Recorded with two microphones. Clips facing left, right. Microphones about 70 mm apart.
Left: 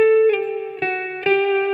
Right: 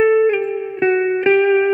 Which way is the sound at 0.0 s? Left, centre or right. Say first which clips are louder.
Right 1 dB; centre.